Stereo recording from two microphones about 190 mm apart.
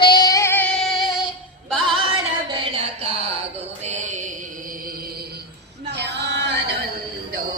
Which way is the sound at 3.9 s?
40° right (ahead or behind).